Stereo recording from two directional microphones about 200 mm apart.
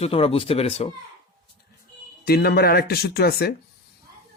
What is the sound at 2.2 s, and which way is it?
Speech, 50° left (ahead or behind).